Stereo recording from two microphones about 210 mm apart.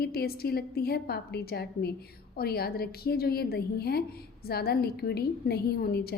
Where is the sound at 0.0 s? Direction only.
45° left (ahead or behind).